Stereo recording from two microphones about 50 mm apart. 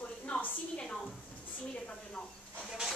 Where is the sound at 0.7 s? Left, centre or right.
Centre.